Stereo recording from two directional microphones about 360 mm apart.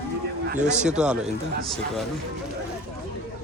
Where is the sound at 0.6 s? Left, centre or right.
Centre.